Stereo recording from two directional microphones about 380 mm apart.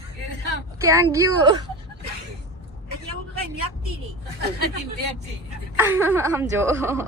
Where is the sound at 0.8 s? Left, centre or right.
Centre.